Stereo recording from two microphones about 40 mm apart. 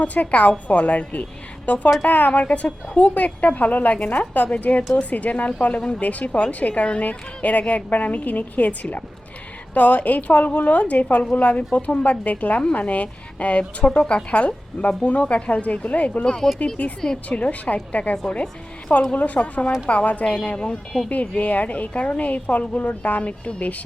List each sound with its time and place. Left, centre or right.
0.0 s a woman's voice: left
2.4 s a woman's voice: left
16.2 s speech: centre
16.8 s a woman's voice: left
21.1 s a woman's voice: left